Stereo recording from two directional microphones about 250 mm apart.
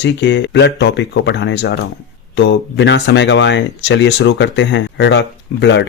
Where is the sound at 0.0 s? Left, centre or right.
Left.